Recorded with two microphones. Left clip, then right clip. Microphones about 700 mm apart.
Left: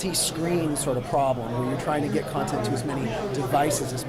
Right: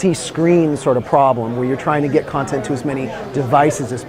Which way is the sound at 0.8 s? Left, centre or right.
Right.